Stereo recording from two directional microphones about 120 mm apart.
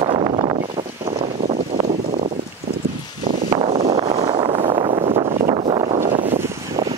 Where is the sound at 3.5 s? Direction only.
50° right (ahead or behind).